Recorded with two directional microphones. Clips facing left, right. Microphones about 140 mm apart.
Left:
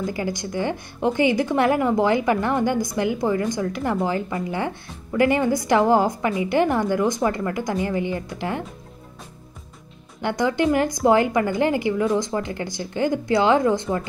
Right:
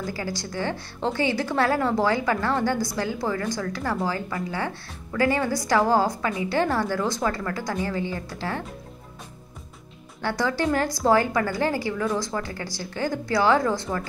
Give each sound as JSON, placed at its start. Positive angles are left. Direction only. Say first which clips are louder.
{"t": 0.0, "sound": "a woman's voice", "louder": "left 4 dB", "side_deg": 20}
{"t": 10.2, "sound": "a woman's voice", "louder": "left 4 dB", "side_deg": 20}